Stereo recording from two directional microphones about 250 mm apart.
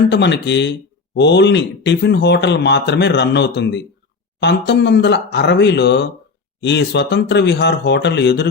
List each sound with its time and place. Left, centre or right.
0.1 s speech: left